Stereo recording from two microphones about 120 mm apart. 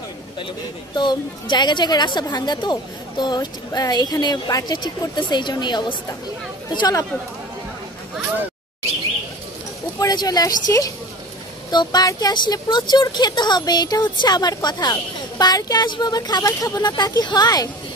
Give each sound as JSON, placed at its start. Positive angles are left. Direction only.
{"t": 0.9, "sound": "speech", "side_deg": 40}
{"t": 9.9, "sound": "speech", "side_deg": 30}
{"t": 11.7, "sound": "speech", "side_deg": 35}